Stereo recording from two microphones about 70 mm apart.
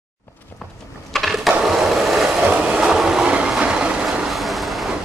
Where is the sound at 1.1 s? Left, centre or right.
Centre.